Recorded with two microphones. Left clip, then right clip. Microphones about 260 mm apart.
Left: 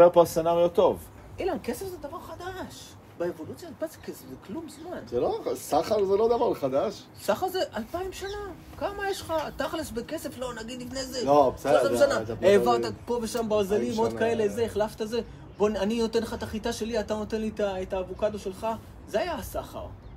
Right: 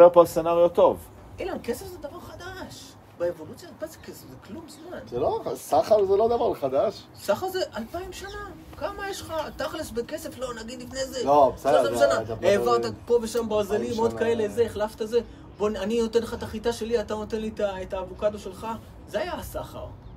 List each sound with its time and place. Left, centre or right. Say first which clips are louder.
0.0 s speech: right 3 dB; centre
1.4 s a man's voice: even; centre
3.2 s a man's voice: right 4 dB; centre
5.1 s speech: right 1 dB; centre
7.2 s a man's voice: right 1 dB; centre
11.2 s speech: right 2 dB; centre
11.8 s a man's voice: right 1 dB; centre